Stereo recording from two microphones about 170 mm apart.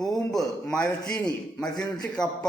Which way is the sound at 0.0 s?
25° left (ahead or behind).